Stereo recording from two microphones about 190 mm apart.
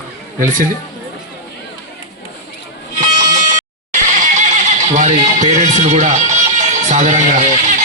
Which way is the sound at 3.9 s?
40° right (ahead or behind).